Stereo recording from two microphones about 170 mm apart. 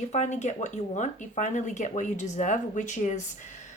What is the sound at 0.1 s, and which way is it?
Speech, 45° left (ahead or behind).